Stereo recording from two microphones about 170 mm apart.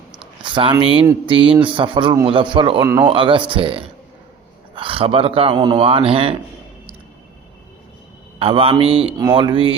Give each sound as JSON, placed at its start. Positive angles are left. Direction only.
{"t": 0.2, "sound": "a sound", "side_deg": -30}
{"t": 1.3, "sound": "a man's voice", "side_deg": -30}
{"t": 2.8, "sound": "a man's voice", "side_deg": -20}
{"t": 3.1, "sound": "speech", "side_deg": -30}
{"t": 8.4, "sound": "a man's voice", "side_deg": -35}